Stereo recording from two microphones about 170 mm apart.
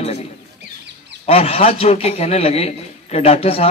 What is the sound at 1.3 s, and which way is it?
A man's voice, 35° left (ahead or behind).